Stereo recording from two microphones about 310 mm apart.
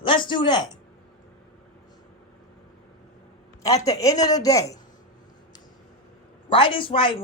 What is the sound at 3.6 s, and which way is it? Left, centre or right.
Speech, centre.